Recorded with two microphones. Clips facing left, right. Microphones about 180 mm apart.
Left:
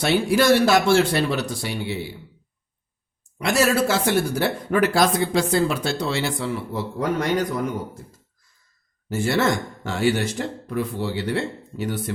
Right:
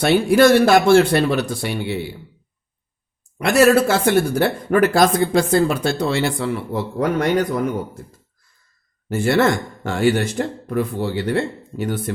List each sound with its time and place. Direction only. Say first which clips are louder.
0.0 s speech: right 6 dB; 55° right (ahead or behind)
3.3 s speech: right 6 dB; 60° right (ahead or behind)
9.0 s speech: right 4 dB; 55° right (ahead or behind)